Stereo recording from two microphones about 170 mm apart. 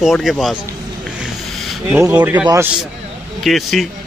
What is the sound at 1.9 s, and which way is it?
Speech, 10° right (ahead or behind).